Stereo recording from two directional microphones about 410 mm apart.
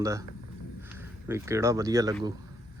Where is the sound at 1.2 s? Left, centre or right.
Centre.